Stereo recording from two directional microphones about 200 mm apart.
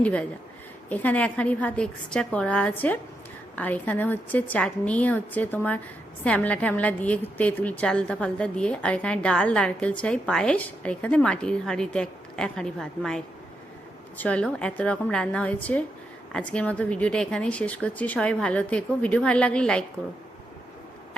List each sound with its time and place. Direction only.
0.0 s a woman's voice: 5° left (ahead or behind)